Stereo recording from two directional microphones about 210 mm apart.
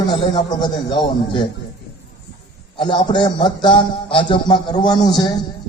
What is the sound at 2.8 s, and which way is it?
A man's voice, 20° left (ahead or behind).